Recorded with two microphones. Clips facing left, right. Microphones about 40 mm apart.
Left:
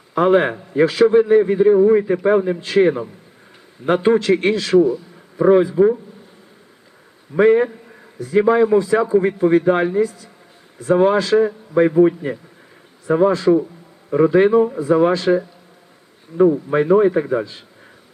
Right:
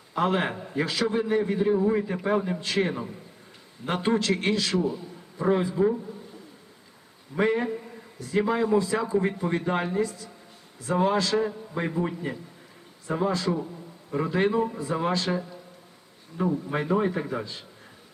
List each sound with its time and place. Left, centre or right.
0.1 s a man's voice: centre
7.3 s a man's voice: centre
16.4 s a man's voice: centre